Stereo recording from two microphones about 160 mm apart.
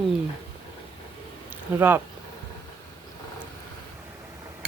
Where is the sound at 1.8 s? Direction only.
15° right (ahead or behind).